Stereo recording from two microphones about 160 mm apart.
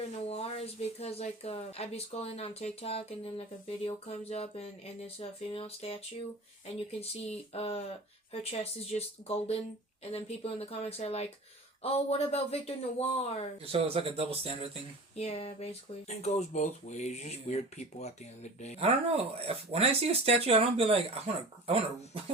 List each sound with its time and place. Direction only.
0.3 s speech: 40° left (ahead or behind)
7.3 s speech: 40° left (ahead or behind)
13.7 s speech: 35° right (ahead or behind)
15.1 s speech: 40° left (ahead or behind)
18.8 s speech: 40° right (ahead or behind)